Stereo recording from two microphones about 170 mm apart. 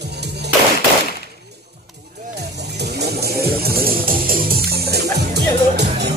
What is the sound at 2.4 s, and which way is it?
Music, 80° right.